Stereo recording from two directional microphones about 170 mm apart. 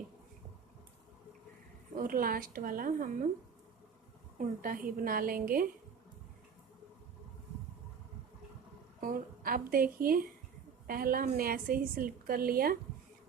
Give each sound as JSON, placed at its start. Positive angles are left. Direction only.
{"t": 2.0, "sound": "a woman's voice", "side_deg": -55}
{"t": 4.4, "sound": "a woman's voice", "side_deg": -55}
{"t": 9.0, "sound": "a woman's voice", "side_deg": -55}